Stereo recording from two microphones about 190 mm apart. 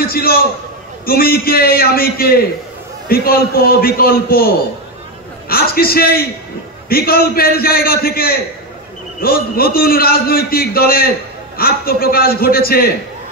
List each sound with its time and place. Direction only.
0.0 s a man's voice: 50° left (ahead or behind)